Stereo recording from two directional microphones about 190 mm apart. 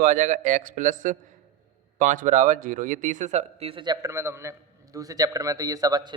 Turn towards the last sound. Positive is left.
turn(degrees=-20)  # may be behind; listen again after turning